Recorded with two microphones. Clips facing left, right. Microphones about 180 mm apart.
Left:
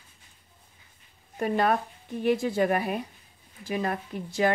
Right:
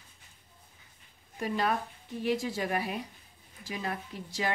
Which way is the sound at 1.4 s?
55° left (ahead or behind).